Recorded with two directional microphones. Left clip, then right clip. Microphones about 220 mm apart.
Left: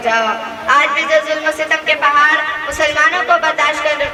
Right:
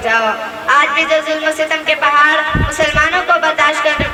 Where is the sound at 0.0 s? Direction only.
20° right (ahead or behind).